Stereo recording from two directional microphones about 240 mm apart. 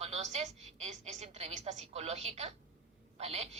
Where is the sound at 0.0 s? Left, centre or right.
Right.